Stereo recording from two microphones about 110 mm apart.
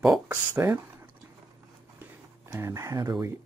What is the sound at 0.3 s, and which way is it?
Speech, 20° right (ahead or behind).